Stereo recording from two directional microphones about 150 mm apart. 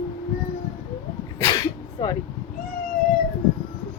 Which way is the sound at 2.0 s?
25° left (ahead or behind).